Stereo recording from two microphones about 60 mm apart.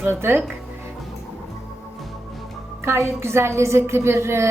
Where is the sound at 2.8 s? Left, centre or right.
Right.